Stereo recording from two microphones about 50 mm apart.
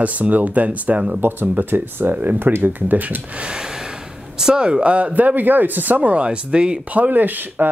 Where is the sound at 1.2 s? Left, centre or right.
Right.